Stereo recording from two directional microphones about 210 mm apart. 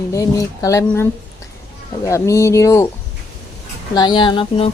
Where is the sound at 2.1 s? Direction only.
15° left (ahead or behind).